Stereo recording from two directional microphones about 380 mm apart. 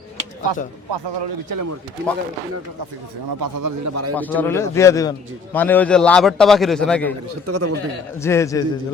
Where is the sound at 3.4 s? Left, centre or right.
Right.